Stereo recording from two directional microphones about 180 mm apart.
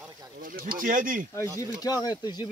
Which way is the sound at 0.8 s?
45° right (ahead or behind).